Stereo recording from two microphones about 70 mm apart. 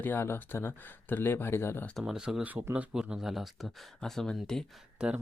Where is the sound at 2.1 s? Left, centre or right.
Centre.